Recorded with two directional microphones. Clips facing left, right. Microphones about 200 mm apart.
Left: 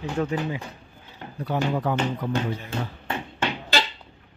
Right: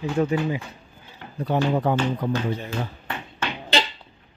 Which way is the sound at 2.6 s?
25° left (ahead or behind).